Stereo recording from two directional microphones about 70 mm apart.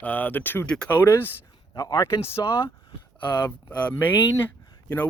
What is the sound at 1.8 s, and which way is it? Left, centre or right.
Speech, left.